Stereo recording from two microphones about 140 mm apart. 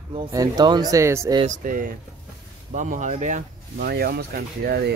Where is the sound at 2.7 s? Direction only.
65° right (ahead or behind); by 4.7 s 90° right.